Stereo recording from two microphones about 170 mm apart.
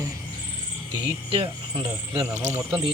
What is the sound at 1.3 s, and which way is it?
Speech, 30° right (ahead or behind).